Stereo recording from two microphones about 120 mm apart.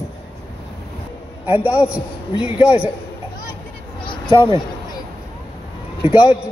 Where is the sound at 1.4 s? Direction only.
15° right (ahead or behind).